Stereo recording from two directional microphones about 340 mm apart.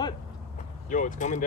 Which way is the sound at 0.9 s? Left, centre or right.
Left.